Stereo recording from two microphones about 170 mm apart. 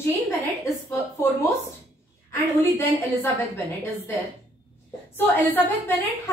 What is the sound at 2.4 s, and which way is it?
Speech, 15° left (ahead or behind).